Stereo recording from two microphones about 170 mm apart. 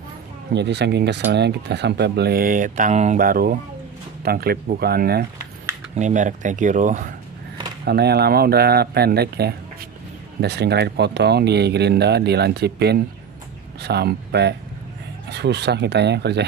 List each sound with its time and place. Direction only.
0.6 s speech: 85° right; by 5.2 s 65° right (ahead or behind)
5.9 s speech: 45° right (ahead or behind)
7.8 s speech: 75° right (ahead or behind)